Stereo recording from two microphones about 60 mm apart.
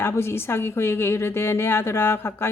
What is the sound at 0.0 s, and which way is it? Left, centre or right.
A woman's voice, left.